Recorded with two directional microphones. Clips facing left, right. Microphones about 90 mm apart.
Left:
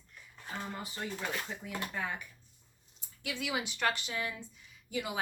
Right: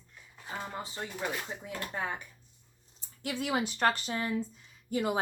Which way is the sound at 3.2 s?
40° right (ahead or behind).